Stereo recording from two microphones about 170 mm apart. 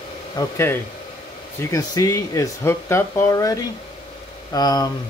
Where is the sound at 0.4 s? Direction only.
15° left (ahead or behind).